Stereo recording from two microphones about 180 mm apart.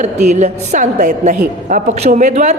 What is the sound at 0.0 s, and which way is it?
A woman's voice, 40° right (ahead or behind).